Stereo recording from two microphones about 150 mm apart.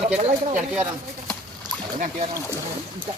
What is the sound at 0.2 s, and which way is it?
Speech, 50° right (ahead or behind).